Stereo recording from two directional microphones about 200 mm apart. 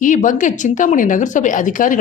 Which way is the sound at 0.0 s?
40° left (ahead or behind).